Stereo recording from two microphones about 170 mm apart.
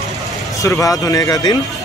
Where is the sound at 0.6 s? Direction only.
20° left (ahead or behind).